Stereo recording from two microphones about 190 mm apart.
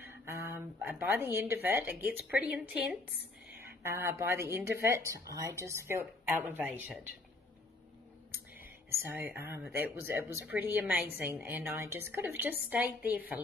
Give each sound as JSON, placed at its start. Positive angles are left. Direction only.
{"t": 0.0, "sound": "a woman's voice", "side_deg": -15}
{"t": 8.5, "sound": "a woman's voice", "side_deg": -10}